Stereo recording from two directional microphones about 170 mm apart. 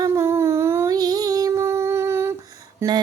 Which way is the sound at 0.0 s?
15° right (ahead or behind).